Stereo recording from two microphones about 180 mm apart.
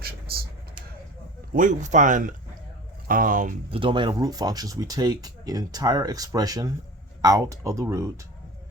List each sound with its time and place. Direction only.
1.5 s speech: 45° right (ahead or behind)
3.7 s speech: 30° right (ahead or behind)